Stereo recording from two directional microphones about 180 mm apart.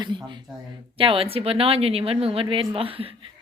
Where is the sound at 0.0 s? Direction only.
25° right (ahead or behind).